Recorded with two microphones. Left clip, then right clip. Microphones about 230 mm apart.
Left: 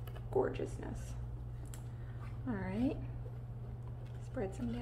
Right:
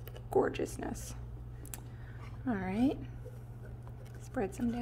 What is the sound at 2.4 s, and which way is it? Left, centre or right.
Speech, right.